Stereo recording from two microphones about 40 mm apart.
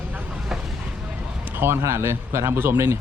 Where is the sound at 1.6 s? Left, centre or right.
Right.